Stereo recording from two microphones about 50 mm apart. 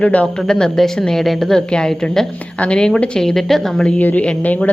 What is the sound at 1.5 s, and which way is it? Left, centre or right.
A woman's voice, centre.